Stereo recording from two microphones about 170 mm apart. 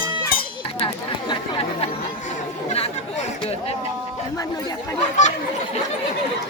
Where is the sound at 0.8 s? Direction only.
30° left (ahead or behind).